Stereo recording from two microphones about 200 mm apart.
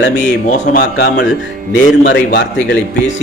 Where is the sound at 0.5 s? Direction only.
40° left (ahead or behind).